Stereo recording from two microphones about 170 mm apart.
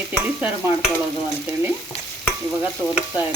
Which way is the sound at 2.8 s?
10° left (ahead or behind).